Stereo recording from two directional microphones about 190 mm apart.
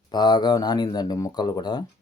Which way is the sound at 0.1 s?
20° left (ahead or behind).